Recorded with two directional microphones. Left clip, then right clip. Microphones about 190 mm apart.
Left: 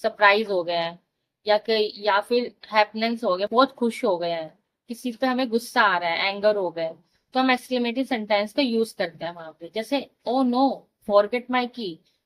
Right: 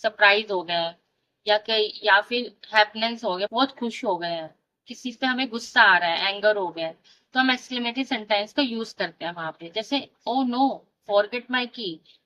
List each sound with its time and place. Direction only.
0.0 s a woman's voice: 25° left (ahead or behind)